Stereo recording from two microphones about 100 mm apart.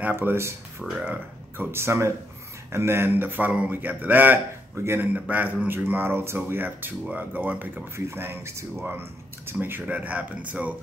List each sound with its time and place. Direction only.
0.0 s speech: 20° right (ahead or behind)